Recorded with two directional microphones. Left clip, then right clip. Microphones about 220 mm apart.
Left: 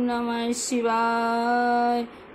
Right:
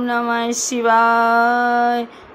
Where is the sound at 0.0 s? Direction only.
15° right (ahead or behind).